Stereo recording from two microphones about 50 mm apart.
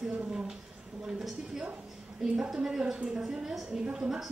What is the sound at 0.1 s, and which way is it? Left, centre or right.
A woman's voice, right.